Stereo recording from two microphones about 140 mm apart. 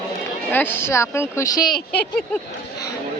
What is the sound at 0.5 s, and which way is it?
Speech, 15° left (ahead or behind).